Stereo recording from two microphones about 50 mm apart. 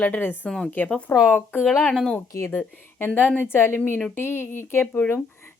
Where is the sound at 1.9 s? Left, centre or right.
Centre.